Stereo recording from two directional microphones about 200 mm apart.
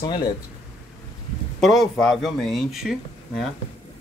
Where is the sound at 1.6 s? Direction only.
Centre (ahead or behind).